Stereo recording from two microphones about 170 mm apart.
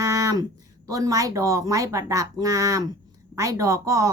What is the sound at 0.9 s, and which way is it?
Speech, 20° right (ahead or behind).